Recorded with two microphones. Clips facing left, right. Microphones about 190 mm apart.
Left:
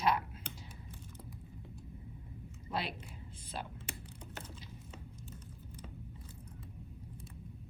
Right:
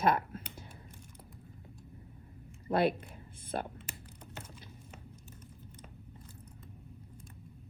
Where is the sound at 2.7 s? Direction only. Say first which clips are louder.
Right 11 dB; 55° right (ahead or behind).